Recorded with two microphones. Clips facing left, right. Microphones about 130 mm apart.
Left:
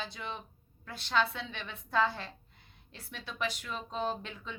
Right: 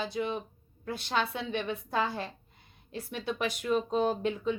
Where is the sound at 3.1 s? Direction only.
55° right (ahead or behind).